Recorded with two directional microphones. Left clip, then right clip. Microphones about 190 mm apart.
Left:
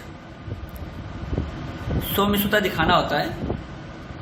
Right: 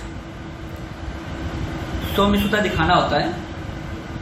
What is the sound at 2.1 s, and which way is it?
A man's voice, 35° left (ahead or behind).